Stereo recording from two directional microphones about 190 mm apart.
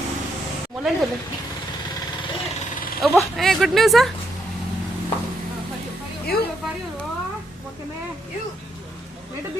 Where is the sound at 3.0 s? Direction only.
Centre (ahead or behind).